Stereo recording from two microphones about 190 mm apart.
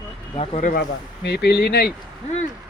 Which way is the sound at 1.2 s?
60° left (ahead or behind).